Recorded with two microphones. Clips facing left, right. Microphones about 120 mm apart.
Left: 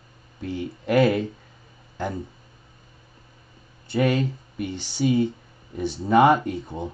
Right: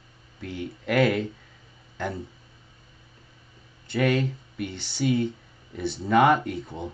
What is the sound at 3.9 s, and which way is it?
Speech, 20° left (ahead or behind).